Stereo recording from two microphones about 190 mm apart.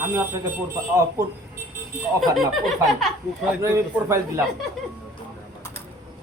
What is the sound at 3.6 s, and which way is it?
Speech, 15° right (ahead or behind).